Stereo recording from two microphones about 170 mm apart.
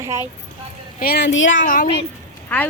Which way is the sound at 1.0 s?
80° left.